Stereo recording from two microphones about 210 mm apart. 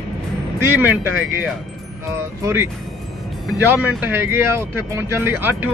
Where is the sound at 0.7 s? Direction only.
10° right (ahead or behind).